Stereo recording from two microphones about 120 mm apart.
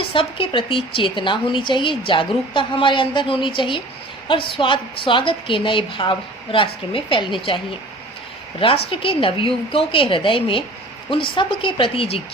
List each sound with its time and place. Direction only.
0.0 s speech: 45° left (ahead or behind)